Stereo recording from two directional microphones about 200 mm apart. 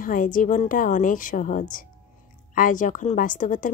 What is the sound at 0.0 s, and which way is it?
A woman's voice, 40° left (ahead or behind).